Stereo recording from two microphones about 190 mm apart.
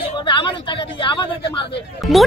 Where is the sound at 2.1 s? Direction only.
Centre (ahead or behind).